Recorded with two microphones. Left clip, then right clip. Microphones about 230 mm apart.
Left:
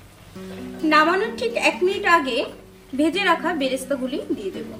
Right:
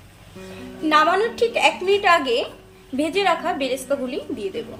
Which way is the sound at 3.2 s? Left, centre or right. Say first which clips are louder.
Right 2 dB; right.